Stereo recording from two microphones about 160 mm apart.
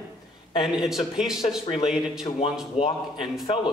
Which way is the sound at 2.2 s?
40° left (ahead or behind).